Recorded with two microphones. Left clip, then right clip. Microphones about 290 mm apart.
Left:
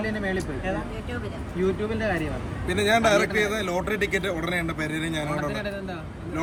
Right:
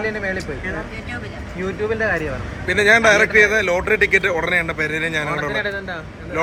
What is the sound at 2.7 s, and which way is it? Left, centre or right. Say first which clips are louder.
A man's voice: right 8 dB; centre.